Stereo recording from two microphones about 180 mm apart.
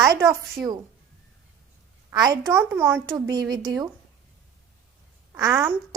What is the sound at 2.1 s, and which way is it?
Speech, 20° right (ahead or behind).